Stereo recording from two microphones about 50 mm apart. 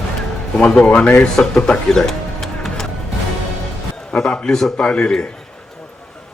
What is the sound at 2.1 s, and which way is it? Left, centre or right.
Music, centre.